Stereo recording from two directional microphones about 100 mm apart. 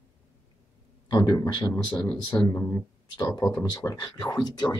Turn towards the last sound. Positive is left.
turn(degrees=45)  # may be behind; listen again after turning